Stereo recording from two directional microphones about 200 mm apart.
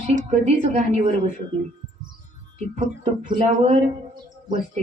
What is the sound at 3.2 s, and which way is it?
Speech, 35° right (ahead or behind).